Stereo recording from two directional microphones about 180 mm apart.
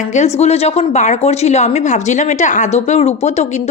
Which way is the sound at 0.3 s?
35° left (ahead or behind).